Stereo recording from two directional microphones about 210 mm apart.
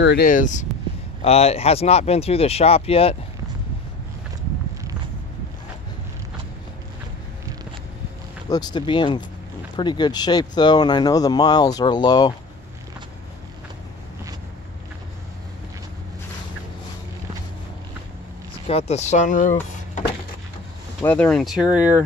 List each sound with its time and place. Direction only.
0.0 s speech: 50° left (ahead or behind); by 3.2 s 30° left (ahead or behind)
8.5 s speech: 20° left (ahead or behind)
18.5 s speech: 30° left (ahead or behind)
21.0 s speech: 5° left (ahead or behind)